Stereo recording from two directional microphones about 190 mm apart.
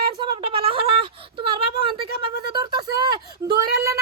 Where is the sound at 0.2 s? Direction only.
25° right (ahead or behind).